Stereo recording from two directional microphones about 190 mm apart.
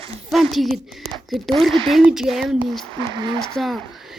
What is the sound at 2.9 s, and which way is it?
Speech, 25° right (ahead or behind).